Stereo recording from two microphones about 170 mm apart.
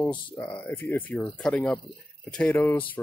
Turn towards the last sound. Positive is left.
turn(degrees=10)  # may be behind; listen again after turning